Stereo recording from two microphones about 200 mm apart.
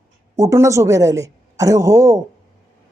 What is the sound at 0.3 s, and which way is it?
Speech, 15° right (ahead or behind).